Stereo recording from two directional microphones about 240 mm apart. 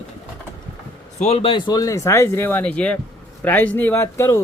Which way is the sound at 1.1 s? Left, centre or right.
Left.